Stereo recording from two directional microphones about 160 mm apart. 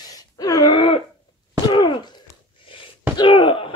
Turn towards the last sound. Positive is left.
turn(degrees=35)  # may be behind; listen again after turning